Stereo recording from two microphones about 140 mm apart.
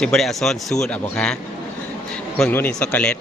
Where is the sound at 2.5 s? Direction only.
10° left (ahead or behind).